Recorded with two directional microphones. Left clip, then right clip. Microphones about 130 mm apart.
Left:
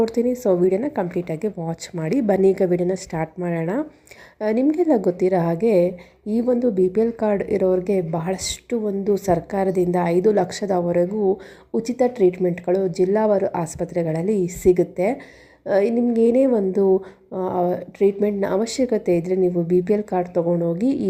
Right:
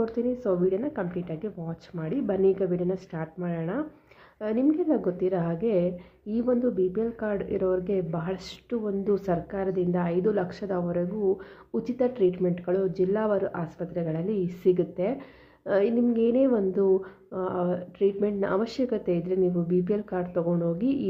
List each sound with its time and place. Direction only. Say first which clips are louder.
0.0 s a woman's voice: left 8 dB; 40° left (ahead or behind)
9.5 s speech: left 8 dB; 45° left (ahead or behind)
11.3 s a woman's voice: left 5 dB; 25° left (ahead or behind)